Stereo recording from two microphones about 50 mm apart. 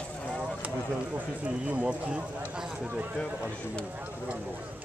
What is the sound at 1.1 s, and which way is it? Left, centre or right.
Speech, right.